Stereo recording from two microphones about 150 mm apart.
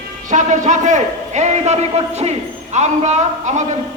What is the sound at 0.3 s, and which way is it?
A man's voice, 55° right (ahead or behind).